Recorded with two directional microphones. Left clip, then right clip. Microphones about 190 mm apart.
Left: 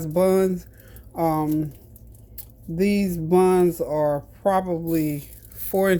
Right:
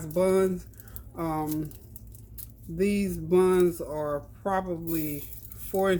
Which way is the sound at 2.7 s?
40° left (ahead or behind).